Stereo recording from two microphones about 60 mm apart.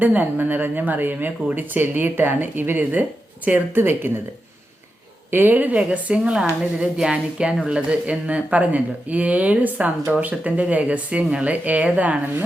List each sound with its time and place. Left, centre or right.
0.0 s a woman's voice: right
5.3 s speech: right